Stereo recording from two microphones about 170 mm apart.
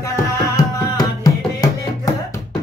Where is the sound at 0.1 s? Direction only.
20° left (ahead or behind).